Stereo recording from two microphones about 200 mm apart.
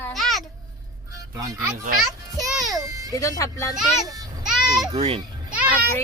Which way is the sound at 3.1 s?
15° left (ahead or behind).